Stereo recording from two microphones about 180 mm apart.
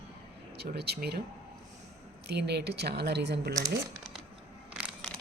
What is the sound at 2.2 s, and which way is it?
Speech, 65° right (ahead or behind).